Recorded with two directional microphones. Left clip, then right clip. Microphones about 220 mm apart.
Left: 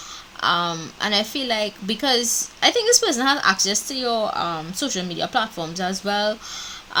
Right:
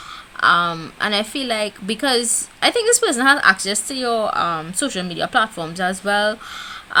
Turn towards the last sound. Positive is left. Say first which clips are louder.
# right 4 dB
turn(degrees=-30)  # may be behind; listen again after turning